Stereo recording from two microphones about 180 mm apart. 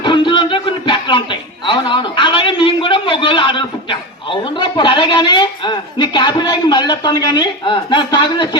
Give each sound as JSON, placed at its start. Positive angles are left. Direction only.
{"t": 0.0, "sound": "music", "side_deg": 25}